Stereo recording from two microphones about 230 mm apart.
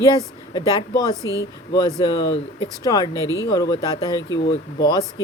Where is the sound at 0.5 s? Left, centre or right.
Centre.